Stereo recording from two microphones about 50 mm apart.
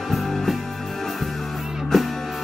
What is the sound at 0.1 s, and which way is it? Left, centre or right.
Music, centre.